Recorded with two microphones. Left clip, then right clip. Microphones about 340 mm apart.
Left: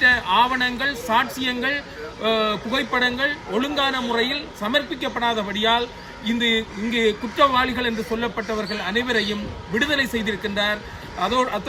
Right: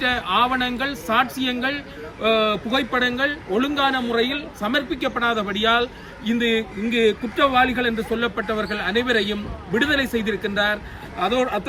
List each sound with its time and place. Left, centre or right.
0.0 s a man's voice: centre